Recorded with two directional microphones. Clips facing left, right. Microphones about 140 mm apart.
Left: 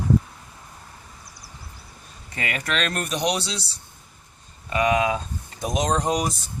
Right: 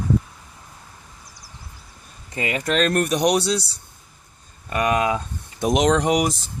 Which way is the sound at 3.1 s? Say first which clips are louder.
Right 3 dB; 45° right (ahead or behind).